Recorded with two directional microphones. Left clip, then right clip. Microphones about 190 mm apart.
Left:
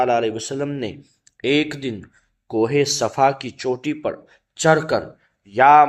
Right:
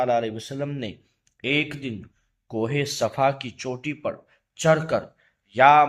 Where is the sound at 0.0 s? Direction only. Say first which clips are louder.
Left 4 dB; 20° left (ahead or behind).